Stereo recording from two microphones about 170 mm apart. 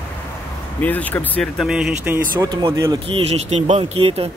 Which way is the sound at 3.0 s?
35° right (ahead or behind).